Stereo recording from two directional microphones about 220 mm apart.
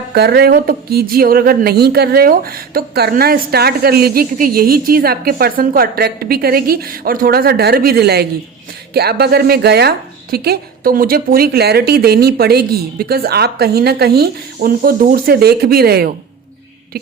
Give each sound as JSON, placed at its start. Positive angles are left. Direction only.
{"t": 0.1, "sound": "speech", "side_deg": -45}